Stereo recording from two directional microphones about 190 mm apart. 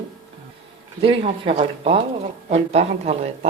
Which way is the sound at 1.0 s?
30° right (ahead or behind).